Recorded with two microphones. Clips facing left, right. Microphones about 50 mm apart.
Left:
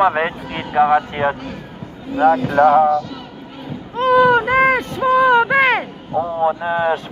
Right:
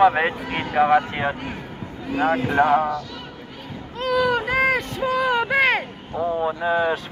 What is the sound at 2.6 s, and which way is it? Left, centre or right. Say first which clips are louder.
Speech: left 7 dB; centre.